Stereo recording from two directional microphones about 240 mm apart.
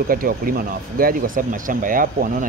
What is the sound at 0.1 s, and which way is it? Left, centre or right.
Speech, right.